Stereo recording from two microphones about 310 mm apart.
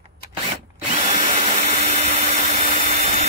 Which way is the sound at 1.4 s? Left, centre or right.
Right.